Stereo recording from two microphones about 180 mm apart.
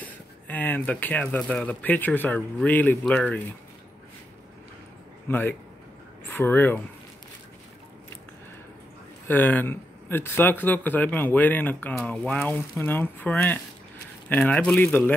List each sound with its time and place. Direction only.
0.0 s speech: 10° left (ahead or behind)
5.3 s speech: 10° left (ahead or behind)
9.3 s speech: 10° left (ahead or behind)